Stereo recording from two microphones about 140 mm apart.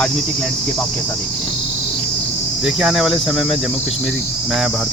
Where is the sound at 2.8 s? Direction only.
5° right (ahead or behind).